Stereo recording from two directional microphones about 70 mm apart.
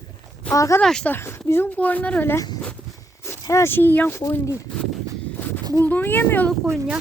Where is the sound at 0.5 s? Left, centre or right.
Left.